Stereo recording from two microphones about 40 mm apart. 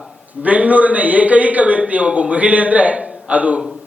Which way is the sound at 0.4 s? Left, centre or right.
Right.